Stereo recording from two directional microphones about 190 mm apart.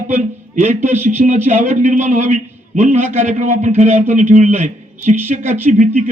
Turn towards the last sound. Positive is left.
turn(degrees=-40)  # may be behind; listen again after turning